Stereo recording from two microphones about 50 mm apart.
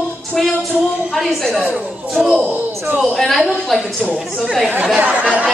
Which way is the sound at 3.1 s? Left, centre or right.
Centre.